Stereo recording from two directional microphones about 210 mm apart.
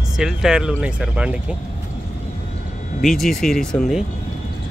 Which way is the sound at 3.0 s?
Centre (ahead or behind).